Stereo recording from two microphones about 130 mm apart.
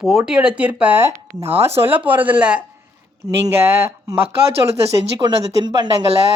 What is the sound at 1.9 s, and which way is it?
Speech, 15° right (ahead or behind).